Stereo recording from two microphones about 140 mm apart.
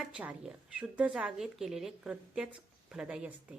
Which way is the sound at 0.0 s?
10° right (ahead or behind).